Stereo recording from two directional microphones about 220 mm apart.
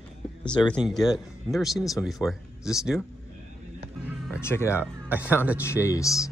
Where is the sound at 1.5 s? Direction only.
Centre (ahead or behind).